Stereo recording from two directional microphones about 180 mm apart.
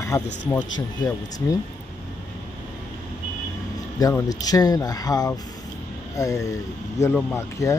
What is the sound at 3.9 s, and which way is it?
Speech, 20° left (ahead or behind).